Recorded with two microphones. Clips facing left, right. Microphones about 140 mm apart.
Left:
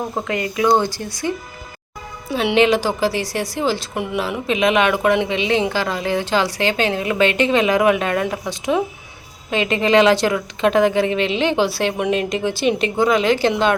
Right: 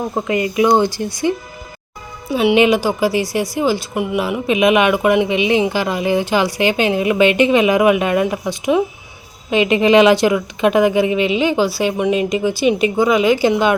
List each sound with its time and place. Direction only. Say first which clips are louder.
0.3 s speech: right 3 dB; 10° right (ahead or behind)
2.3 s speech: right 3 dB; 5° right (ahead or behind)